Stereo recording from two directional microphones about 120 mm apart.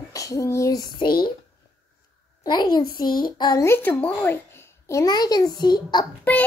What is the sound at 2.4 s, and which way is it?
A child's voice, 35° left (ahead or behind).